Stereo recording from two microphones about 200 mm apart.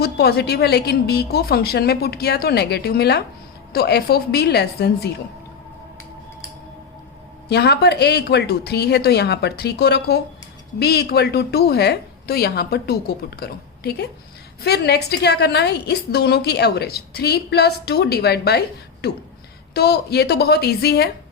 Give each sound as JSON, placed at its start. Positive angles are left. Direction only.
{"t": 0.0, "sound": "a woman's voice", "side_deg": 50}
{"t": 7.5, "sound": "a woman's voice", "side_deg": 55}